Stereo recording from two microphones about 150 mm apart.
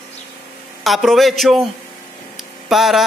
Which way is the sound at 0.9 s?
Centre (ahead or behind).